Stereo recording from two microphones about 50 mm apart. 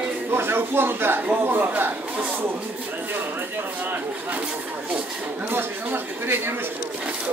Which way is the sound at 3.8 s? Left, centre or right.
Right.